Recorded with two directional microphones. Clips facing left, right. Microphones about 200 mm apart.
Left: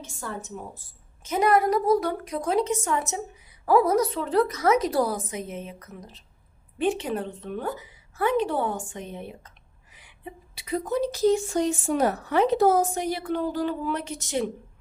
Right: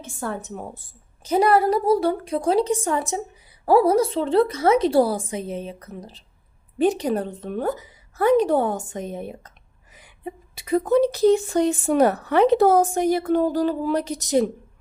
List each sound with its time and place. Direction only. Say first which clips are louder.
0.0 s a woman's voice: right 6 dB; 55° right (ahead or behind)
1.2 s a woman's voice: right 4 dB; 35° right (ahead or behind)